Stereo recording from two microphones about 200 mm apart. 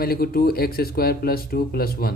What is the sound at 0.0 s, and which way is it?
Speech, 50° left (ahead or behind).